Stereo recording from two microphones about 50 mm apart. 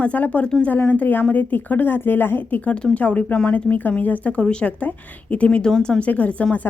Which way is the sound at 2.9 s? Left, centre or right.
Left.